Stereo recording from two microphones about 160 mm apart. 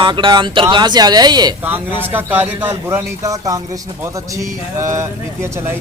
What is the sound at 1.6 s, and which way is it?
A man's voice, 10° right (ahead or behind).